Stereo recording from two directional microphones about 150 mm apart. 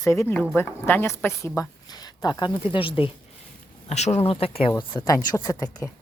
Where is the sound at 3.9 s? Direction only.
45° left (ahead or behind).